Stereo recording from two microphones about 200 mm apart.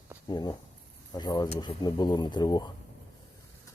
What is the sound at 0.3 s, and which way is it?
Speech, 20° left (ahead or behind).